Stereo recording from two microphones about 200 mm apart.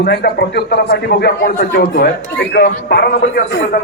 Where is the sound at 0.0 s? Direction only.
50° left (ahead or behind).